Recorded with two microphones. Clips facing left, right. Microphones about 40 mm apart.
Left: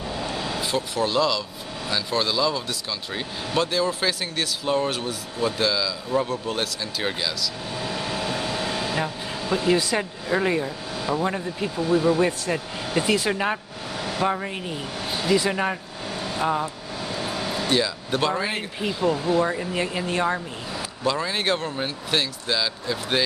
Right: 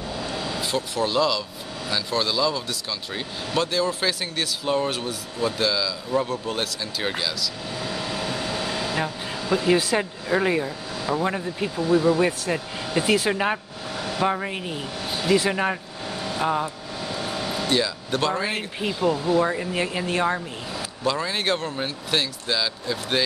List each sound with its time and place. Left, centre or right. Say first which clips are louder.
0.6 s speech: even; centre
7.9 s vehicle: left 1 dB; left
8.6 s vehicle: even; centre
8.9 s air conditioning: even; centre
9.7 s speech: right 1 dB; centre